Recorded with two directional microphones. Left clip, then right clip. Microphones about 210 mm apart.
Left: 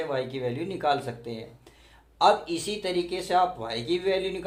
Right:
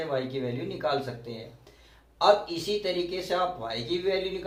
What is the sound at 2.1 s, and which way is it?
Speech, 55° left (ahead or behind).